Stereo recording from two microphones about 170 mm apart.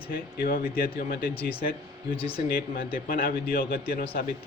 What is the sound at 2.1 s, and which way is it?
Speech, 35° left (ahead or behind).